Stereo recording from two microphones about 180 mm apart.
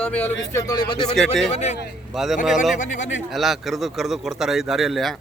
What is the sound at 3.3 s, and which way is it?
Speech, centre (ahead or behind).